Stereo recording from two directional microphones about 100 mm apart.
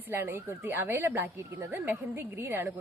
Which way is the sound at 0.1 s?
25° right (ahead or behind).